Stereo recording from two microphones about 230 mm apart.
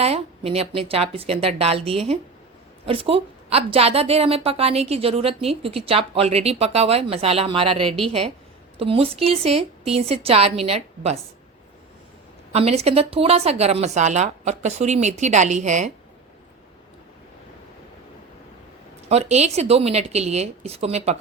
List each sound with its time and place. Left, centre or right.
0.0 s a woman's voice: right
12.5 s a woman's voice: right
19.0 s a woman's voice: right